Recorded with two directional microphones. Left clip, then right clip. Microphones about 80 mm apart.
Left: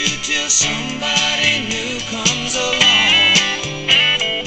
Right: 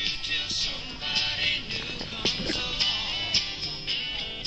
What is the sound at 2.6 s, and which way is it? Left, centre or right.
Music, left.